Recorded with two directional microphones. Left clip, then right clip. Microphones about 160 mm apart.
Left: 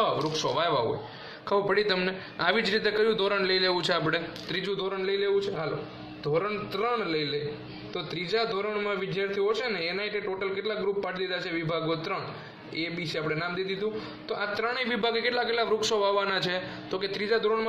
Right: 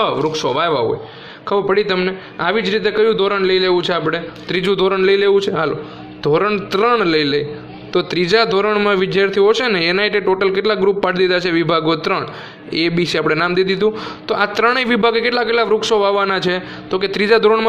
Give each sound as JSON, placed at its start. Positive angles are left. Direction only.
{"t": 0.0, "sound": "speech", "side_deg": -35}
{"t": 1.5, "sound": "a man's voice", "side_deg": -20}
{"t": 4.6, "sound": "a man's voice", "side_deg": -55}